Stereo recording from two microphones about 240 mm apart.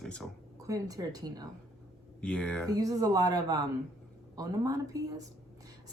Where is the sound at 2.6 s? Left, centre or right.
Centre.